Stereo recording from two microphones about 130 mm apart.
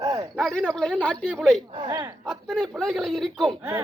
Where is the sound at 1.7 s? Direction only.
35° right (ahead or behind).